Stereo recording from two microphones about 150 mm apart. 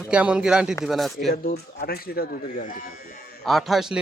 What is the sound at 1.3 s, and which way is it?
Speech, 90° left.